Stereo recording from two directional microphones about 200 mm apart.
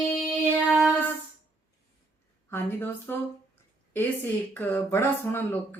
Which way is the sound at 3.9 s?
10° left (ahead or behind).